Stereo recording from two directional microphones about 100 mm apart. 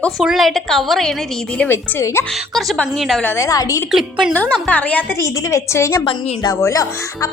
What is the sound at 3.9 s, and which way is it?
Speech, 5° right (ahead or behind).